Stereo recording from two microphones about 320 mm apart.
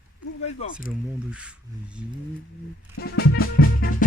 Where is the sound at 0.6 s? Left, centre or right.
Left.